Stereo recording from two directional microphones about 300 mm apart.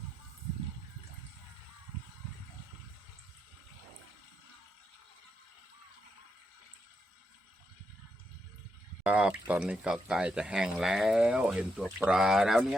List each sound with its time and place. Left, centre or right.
9.0 s speech: centre